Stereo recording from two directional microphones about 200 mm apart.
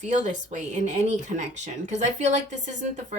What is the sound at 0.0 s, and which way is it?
Speech, 35° right (ahead or behind).